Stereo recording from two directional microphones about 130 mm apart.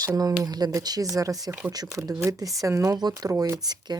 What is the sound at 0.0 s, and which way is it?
Speech, 30° right (ahead or behind).